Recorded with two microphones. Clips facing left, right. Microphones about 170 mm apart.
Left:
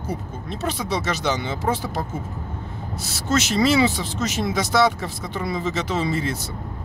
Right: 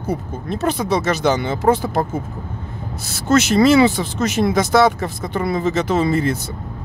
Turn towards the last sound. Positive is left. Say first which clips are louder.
# right 6 dB
turn(degrees=-55)  # may be behind; listen again after turning